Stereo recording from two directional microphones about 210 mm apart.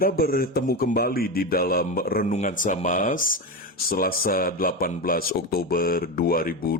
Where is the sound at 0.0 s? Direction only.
45° left (ahead or behind).